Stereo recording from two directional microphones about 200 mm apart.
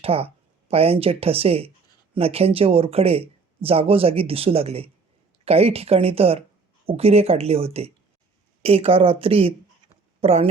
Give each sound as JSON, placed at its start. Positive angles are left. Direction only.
{"t": 0.0, "sound": "speech", "side_deg": -30}